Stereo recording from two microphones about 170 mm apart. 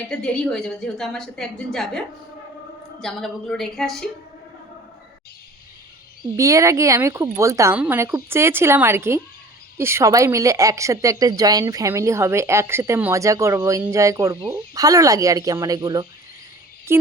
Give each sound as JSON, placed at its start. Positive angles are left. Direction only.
{"t": 0.1, "sound": "a woman's voice", "side_deg": 5}
{"t": 6.3, "sound": "a woman's voice", "side_deg": -20}